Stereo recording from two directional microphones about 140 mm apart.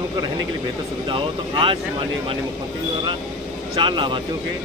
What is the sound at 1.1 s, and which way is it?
Speech, 35° right (ahead or behind).